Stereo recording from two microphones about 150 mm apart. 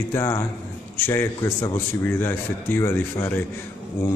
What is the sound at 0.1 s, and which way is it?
Speech, 20° left (ahead or behind).